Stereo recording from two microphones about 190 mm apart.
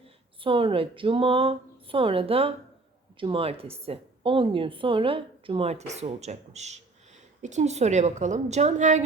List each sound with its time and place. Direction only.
0.3 s a woman's voice: 25° right (ahead or behind)